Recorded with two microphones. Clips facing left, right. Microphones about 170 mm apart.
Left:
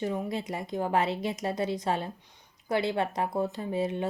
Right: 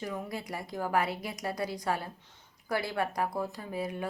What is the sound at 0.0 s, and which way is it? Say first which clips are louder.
A woman's voice: left 6 dB; 25° left (ahead or behind).